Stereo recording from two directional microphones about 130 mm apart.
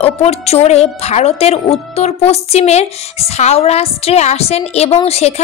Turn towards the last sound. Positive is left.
turn(degrees=55)  # may be behind; listen again after turning